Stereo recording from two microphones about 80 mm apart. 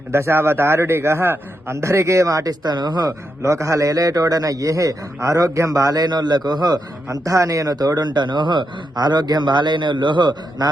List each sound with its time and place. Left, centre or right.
0.1 s a man's voice: right
3.1 s a man's voice: right